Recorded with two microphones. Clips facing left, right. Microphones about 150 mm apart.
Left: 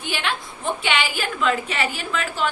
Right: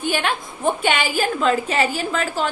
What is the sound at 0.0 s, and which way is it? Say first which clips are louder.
A woman's voice: right 5 dB; 45° right (ahead or behind).